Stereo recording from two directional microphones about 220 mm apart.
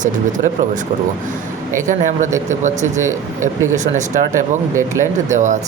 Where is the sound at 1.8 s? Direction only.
35° right (ahead or behind).